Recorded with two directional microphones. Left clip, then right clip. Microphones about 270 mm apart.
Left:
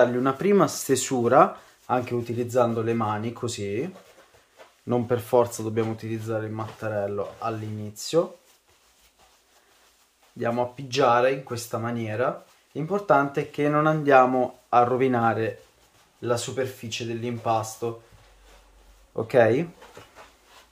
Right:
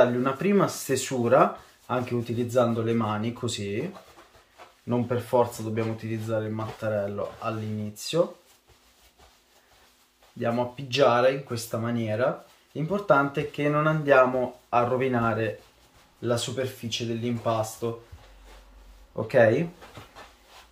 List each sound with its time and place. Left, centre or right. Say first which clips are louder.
0.0 s speech: left 1 dB; left
4.8 s speech: left 3 dB; left
10.4 s speech: left 1 dB; centre
19.2 s speech: left 1 dB; left